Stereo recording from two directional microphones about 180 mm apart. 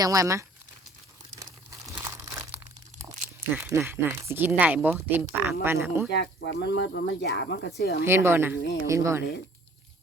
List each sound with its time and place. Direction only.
0.0 s speech: 20° right (ahead or behind)
1.4 s crumpling: 15° right (ahead or behind)
3.0 s speech: 15° right (ahead or behind)
6.1 s speech: 70° left (ahead or behind)
8.0 s speech: 15° right (ahead or behind)
8.5 s speech: 80° left
8.9 s speech: 15° right (ahead or behind)